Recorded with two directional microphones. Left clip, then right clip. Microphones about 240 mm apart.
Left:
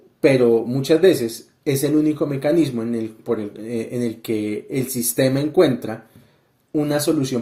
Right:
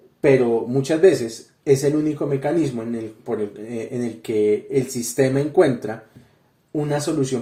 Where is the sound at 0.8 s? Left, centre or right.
Left.